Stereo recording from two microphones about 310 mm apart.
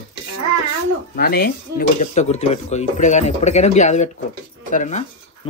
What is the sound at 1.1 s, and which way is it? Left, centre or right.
Speech, left.